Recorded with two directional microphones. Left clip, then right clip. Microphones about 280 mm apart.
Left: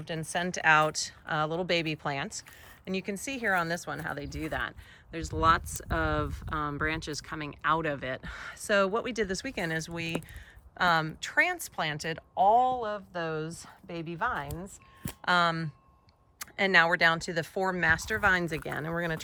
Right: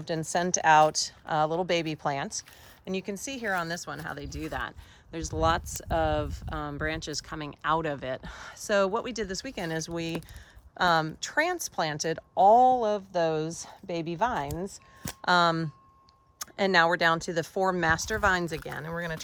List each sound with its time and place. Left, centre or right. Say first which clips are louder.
0.0 s speech: right 4 dB; centre